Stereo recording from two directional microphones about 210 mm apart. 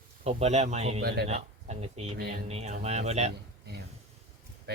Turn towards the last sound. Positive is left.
turn(degrees=-30)  # may be behind; listen again after turning